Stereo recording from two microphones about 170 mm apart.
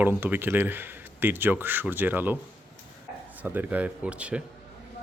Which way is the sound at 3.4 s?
10° right (ahead or behind).